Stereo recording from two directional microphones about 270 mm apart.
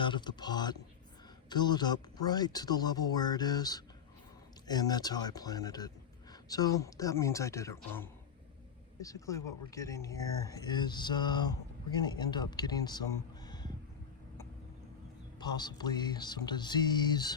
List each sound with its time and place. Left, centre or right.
0.0 s speech: centre
15.4 s speech: centre